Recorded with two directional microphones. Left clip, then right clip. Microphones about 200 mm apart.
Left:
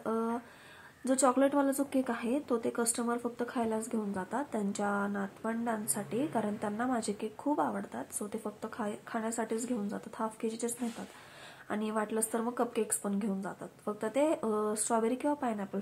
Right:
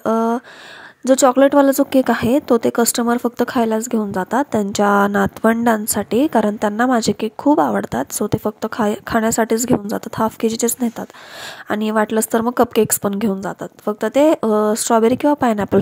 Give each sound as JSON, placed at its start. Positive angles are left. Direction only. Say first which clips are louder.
{"t": 0.0, "sound": "a sound", "louder": "right 16 dB", "side_deg": -45}
{"t": 1.0, "sound": "a woman's voice", "louder": "right 16 dB", "side_deg": -45}
{"t": 11.7, "sound": "a woman's voice", "louder": "right 16 dB", "side_deg": -50}